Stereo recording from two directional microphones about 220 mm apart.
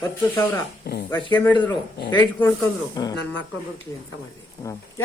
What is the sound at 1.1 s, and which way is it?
Speech, 10° left (ahead or behind).